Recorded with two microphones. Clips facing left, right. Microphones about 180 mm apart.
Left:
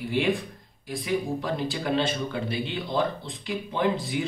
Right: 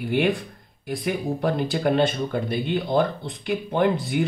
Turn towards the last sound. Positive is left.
turn(degrees=-60)  # may be behind; listen again after turning